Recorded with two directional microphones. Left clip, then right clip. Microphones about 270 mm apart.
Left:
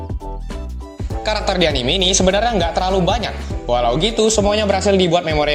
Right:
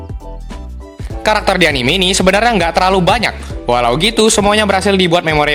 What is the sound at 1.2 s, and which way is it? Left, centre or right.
Speech, right.